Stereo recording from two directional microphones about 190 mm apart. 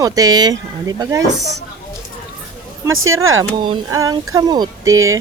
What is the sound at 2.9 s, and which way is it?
Speech, 90° right.